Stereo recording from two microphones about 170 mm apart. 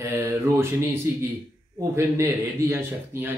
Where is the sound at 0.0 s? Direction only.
15° right (ahead or behind).